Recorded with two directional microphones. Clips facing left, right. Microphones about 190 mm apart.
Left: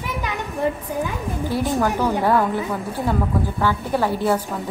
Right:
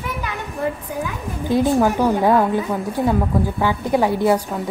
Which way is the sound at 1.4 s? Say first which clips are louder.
Right 5 dB; 20° right (ahead or behind).